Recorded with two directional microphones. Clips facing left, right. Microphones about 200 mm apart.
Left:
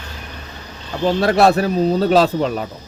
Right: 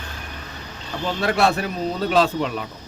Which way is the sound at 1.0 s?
40° left (ahead or behind).